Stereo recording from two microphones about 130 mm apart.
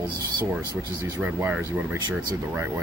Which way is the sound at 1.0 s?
15° right (ahead or behind).